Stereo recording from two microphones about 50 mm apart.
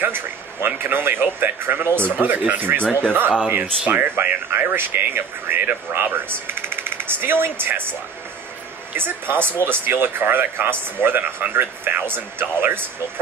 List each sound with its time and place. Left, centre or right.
0.0 s speech: right
2.8 s speech: left
3.1 s speech: right
8.9 s speech: right